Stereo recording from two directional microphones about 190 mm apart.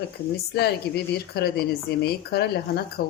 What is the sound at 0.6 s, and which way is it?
Speech, 55° left (ahead or behind).